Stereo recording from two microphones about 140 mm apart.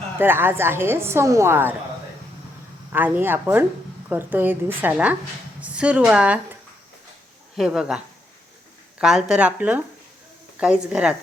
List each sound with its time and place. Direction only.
0.2 s a woman's voice: 15° right (ahead or behind)
2.9 s a woman's voice: 15° right (ahead or behind)